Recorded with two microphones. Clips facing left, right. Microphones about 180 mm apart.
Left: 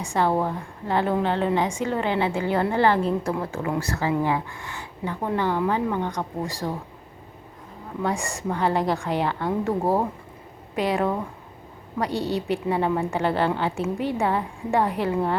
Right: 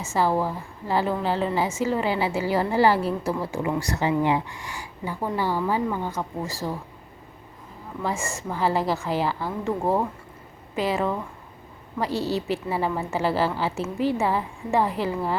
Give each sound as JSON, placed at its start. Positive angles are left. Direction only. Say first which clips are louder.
{"t": 0.0, "sound": "a woman's voice", "louder": "even", "side_deg": -5}
{"t": 5.0, "sound": "a woman's voice", "louder": "left 1 dB", "side_deg": -10}
{"t": 8.0, "sound": "a woman's voice", "louder": "left 2 dB", "side_deg": 0}